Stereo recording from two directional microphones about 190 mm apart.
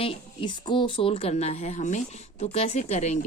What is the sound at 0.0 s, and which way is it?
Speech, 25° left (ahead or behind).